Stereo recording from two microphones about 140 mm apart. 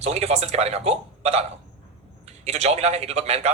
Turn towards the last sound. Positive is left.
turn(degrees=-50)  # may be behind; listen again after turning